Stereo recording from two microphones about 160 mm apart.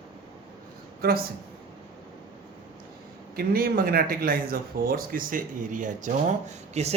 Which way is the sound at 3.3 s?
65° right (ahead or behind).